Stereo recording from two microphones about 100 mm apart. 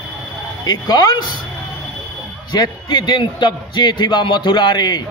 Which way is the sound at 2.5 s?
45° left (ahead or behind).